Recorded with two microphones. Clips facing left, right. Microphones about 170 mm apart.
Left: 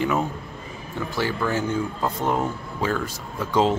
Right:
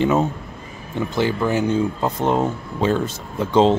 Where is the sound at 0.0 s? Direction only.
25° right (ahead or behind).